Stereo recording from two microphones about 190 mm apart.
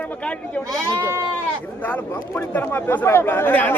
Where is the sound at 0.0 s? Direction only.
5° left (ahead or behind).